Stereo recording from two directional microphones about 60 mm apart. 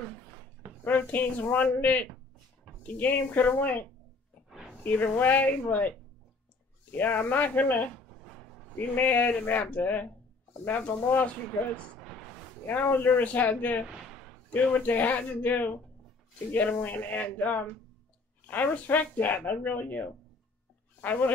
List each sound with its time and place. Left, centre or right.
0.8 s speech: left
4.8 s speech: left
11.7 s speech: centre
12.6 s speech: left